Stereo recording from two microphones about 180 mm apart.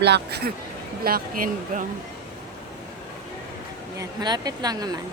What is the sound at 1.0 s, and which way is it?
Speech, 50° right (ahead or behind).